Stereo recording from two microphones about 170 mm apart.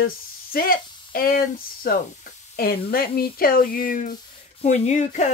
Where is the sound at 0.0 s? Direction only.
60° left (ahead or behind).